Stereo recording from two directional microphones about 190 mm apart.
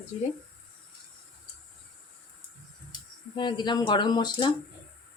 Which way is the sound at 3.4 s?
25° left (ahead or behind).